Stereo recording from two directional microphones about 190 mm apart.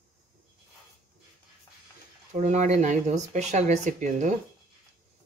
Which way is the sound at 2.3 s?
40° right (ahead or behind).